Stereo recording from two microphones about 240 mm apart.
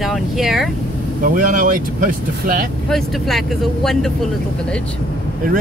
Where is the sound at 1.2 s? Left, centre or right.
Right.